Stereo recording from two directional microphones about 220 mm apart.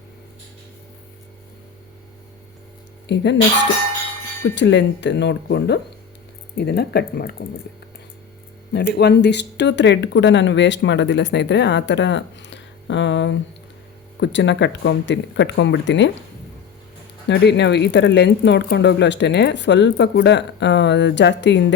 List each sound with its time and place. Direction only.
3.1 s speech: 50° left (ahead or behind)
4.4 s speech: 55° left (ahead or behind)
8.7 s speech: 50° left (ahead or behind)
17.2 s speech: 50° left (ahead or behind)